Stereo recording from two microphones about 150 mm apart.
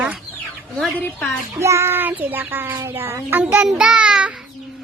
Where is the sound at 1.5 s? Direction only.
20° right (ahead or behind).